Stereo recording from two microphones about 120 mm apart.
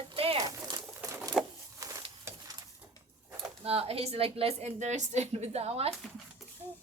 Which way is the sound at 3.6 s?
55° right (ahead or behind).